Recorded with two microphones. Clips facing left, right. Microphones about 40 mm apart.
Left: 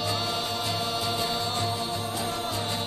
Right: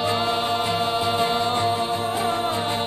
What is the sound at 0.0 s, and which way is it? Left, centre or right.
Music, right.